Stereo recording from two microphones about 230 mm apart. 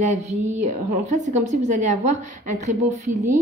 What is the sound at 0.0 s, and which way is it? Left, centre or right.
A woman's voice, right.